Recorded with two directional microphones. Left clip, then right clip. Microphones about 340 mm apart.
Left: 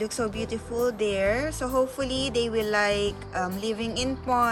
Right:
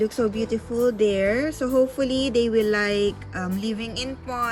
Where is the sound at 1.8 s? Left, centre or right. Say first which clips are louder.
Right 5 dB; centre.